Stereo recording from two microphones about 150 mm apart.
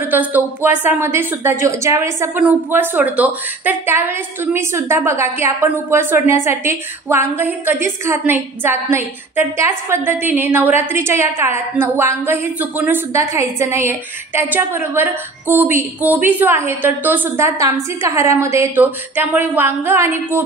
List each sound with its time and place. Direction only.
0.1 s speech: 10° right (ahead or behind)